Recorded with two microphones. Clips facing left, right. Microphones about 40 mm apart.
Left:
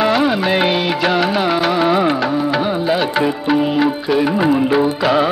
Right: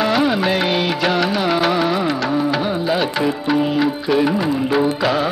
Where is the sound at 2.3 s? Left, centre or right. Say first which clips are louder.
Left 2 dB; centre.